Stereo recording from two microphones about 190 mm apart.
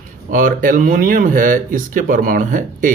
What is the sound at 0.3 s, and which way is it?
Speech, 45° right (ahead or behind).